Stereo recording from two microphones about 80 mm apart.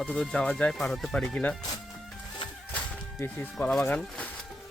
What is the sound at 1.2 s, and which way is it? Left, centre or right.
Speech, centre.